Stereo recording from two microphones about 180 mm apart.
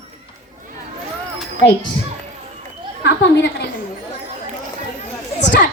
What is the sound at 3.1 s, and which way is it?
Speech, 70° left (ahead or behind).